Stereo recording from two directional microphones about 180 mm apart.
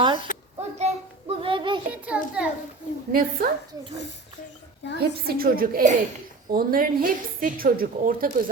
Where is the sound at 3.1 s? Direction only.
55° right (ahead or behind).